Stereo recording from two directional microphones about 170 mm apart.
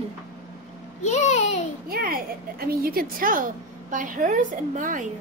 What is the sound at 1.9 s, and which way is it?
A woman's voice, 60° right (ahead or behind).